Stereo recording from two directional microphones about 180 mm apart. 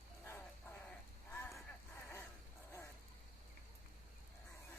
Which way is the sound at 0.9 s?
10° left (ahead or behind).